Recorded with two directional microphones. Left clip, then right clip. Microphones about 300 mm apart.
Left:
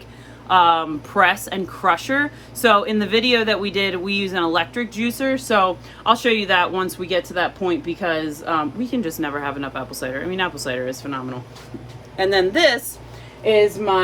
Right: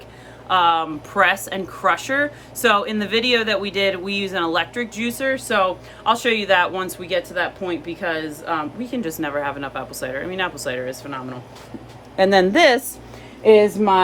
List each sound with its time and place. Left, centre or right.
0.4 s a woman's voice: centre
12.1 s a woman's voice: centre